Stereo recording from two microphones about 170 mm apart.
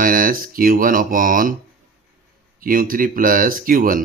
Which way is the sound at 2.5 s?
55° right (ahead or behind).